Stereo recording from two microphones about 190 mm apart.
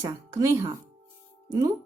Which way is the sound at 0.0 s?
15° right (ahead or behind).